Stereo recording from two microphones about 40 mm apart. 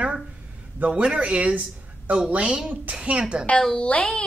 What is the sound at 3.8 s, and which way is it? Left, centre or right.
Speech, left.